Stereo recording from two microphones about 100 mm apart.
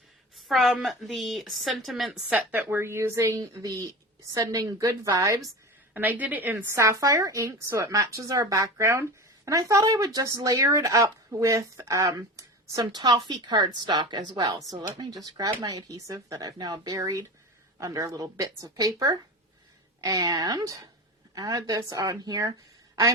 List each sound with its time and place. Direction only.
0.3 s a woman's voice: centre (ahead or behind)
2.3 s a woman's voice: 15° right (ahead or behind); by 5.4 s 35° right (ahead or behind)
5.9 s a woman's voice: 20° right (ahead or behind)
6.7 s speech: 30° right (ahead or behind)